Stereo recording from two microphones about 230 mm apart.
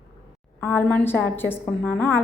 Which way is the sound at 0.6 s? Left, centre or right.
Centre.